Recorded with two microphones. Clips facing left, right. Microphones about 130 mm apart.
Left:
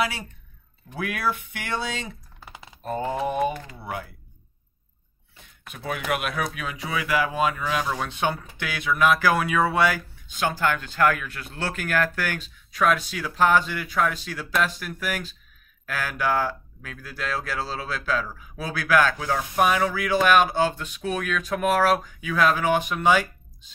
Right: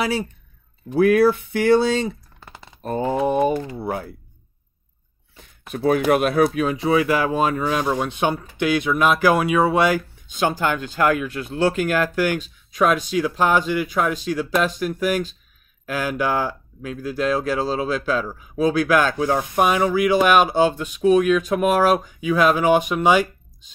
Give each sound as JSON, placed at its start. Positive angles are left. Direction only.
{"t": 0.9, "sound": "speech", "side_deg": -35}
{"t": 3.3, "sound": "speech", "side_deg": -35}
{"t": 5.7, "sound": "speech", "side_deg": -35}
{"t": 7.8, "sound": "speech", "side_deg": -15}